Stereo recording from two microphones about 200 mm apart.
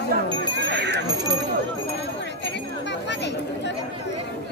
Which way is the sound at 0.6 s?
60° right (ahead or behind).